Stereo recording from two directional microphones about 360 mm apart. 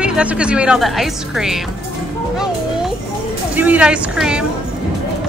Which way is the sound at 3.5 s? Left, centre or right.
Centre.